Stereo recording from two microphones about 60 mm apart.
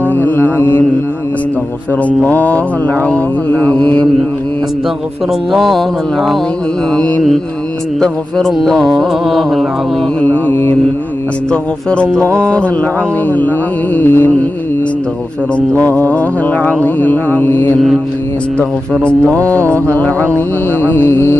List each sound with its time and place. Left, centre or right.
0.1 s mantra: left
2.0 s mantra: left
5.5 s speech: centre
8.0 s speech: centre
10.2 s mantra: left
11.5 s mantra: centre; by 14.3 s left
15.8 s mantra: left
19.0 s mantra: left
19.6 s speech: right
20.8 s mantra: left